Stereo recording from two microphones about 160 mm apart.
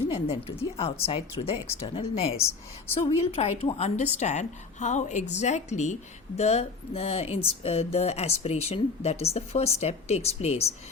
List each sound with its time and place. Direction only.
0.1 s speech: 35° left (ahead or behind)
2.4 s speech: 15° left (ahead or behind)
2.9 s a woman's voice: 40° left (ahead or behind)